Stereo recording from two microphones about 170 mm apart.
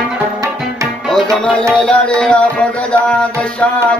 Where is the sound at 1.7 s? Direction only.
5° left (ahead or behind).